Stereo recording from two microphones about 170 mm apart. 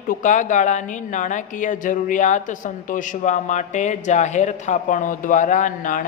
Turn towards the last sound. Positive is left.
turn(degrees=50)  # may be behind; listen again after turning